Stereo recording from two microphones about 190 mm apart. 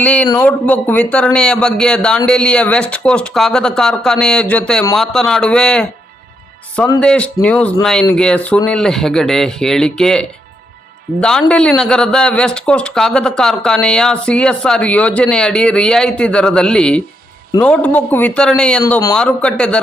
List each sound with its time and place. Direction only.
0.0 s a man's voice: 5° left (ahead or behind)
7.0 s a man's voice: 5° left (ahead or behind)
18.9 s a man's voice: 15° left (ahead or behind)
19.1 s a man's voice: 5° left (ahead or behind)